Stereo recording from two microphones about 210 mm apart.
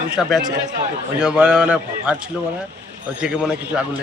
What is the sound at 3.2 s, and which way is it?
Speech, 5° right (ahead or behind).